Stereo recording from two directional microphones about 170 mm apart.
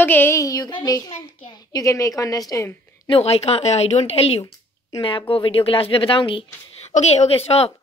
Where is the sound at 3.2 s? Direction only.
35° left (ahead or behind).